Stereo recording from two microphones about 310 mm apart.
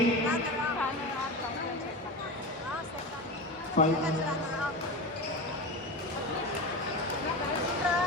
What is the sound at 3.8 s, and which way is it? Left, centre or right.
Speech, left.